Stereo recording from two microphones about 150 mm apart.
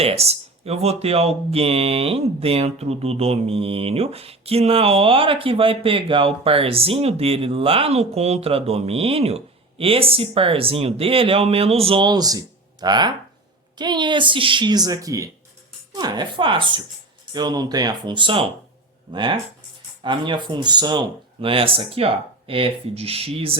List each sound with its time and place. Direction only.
0.0 s speech: 45° right (ahead or behind)